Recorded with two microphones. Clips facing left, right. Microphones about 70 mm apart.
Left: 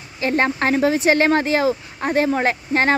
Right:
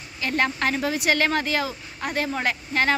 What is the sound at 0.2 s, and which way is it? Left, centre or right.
Speech, left.